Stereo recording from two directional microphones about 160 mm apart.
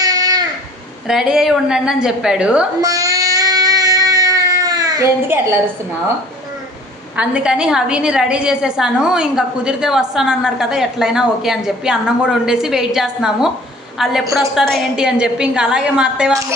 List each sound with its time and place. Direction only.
0.0 s a sound: 25° right (ahead or behind)
1.0 s a woman's voice: 5° right (ahead or behind)
2.8 s music: 20° right (ahead or behind)
7.2 s a woman's voice: 5° right (ahead or behind)